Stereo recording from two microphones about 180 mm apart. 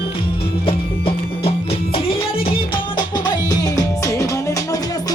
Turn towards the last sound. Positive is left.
turn(degrees=20)  # may be behind; listen again after turning